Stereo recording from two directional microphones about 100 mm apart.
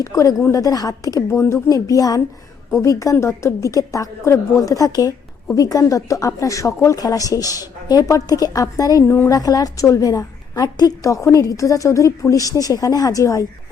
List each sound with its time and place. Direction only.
0.0 s a woman's voice: 35° left (ahead or behind)